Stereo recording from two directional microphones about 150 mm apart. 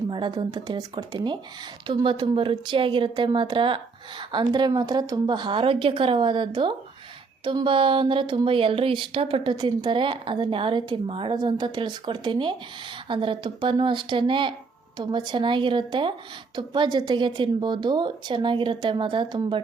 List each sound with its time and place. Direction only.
0.1 s speech: 30° right (ahead or behind)